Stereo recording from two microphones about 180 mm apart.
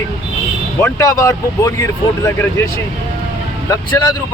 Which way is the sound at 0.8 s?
15° left (ahead or behind).